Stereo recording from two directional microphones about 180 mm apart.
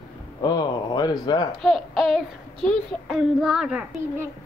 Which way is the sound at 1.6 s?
Centre (ahead or behind).